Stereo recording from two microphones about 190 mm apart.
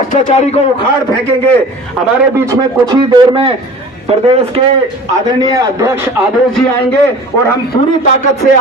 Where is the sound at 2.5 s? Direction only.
20° right (ahead or behind).